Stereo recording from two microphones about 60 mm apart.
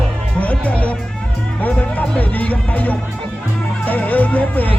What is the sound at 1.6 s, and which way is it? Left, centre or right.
Speech, left.